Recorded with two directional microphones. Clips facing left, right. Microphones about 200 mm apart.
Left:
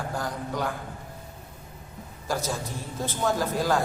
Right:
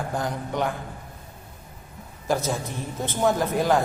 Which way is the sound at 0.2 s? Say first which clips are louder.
Right 4 dB; 20° right (ahead or behind).